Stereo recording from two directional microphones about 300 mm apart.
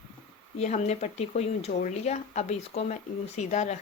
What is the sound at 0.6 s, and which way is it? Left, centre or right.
A woman's voice, left.